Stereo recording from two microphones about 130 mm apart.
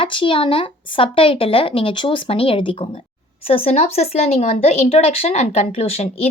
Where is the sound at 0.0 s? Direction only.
40° left (ahead or behind).